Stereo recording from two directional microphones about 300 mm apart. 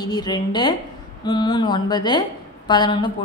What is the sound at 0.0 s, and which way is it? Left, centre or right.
A woman's voice, centre.